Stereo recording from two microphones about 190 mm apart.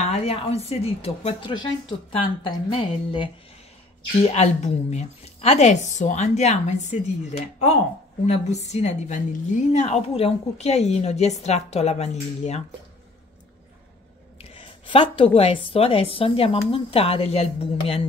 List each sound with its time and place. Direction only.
0.0 s a woman's voice: 35° left (ahead or behind)
2.4 s a sound: 25° left (ahead or behind)
4.2 s a woman's voice: 35° left (ahead or behind)
14.4 s a woman's voice: 30° left (ahead or behind)